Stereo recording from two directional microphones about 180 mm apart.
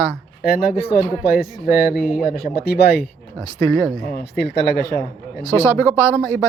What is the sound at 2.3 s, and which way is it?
Speech, 55° left (ahead or behind).